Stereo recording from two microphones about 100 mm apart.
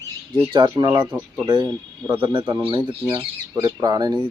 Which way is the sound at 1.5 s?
45° right (ahead or behind).